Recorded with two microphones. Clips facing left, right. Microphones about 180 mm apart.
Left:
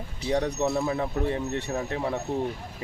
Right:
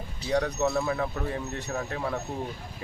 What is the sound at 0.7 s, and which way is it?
Speech, 15° left (ahead or behind).